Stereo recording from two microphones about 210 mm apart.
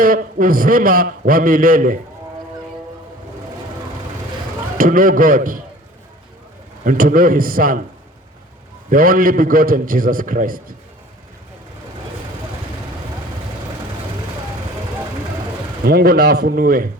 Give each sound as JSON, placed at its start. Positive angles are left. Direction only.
{"t": 0.0, "sound": "a man's voice", "side_deg": -40}
{"t": 4.8, "sound": "a man's voice", "side_deg": -40}
{"t": 6.8, "sound": "a man's voice", "side_deg": -40}
{"t": 8.9, "sound": "a man's voice", "side_deg": -40}
{"t": 15.8, "sound": "a man's voice", "side_deg": -45}